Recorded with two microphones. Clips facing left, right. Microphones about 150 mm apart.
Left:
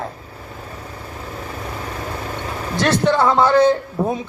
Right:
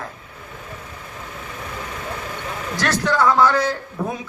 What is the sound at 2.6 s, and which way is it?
A man's voice, 25° left (ahead or behind).